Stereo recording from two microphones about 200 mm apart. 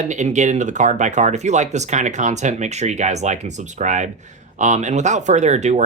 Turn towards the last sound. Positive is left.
turn(degrees=-35)  # may be behind; listen again after turning